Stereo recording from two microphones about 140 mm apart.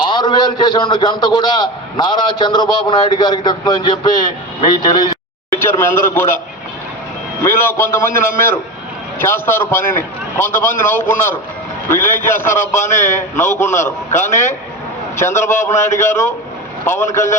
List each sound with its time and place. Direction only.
0.1 s a man's voice: 35° left (ahead or behind)
5.5 s a man's voice: 15° left (ahead or behind)
7.4 s a man's voice: 15° left (ahead or behind)